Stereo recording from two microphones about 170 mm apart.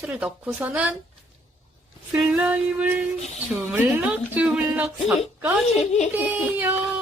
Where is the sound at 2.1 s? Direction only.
5° right (ahead or behind).